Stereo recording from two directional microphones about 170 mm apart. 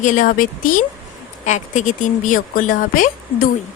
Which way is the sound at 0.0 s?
50° left (ahead or behind).